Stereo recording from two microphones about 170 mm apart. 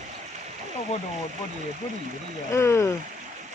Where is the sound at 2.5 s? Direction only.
15° left (ahead or behind).